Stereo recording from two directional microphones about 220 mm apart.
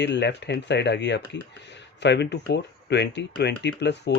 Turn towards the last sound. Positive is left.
turn(degrees=50)  # may be behind; listen again after turning